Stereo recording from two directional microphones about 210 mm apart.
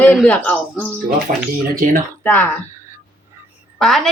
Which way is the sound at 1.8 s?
40° right (ahead or behind).